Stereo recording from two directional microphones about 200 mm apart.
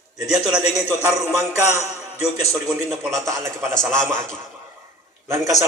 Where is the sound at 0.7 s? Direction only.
15° right (ahead or behind).